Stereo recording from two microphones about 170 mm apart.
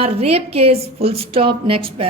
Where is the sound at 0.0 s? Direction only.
35° right (ahead or behind).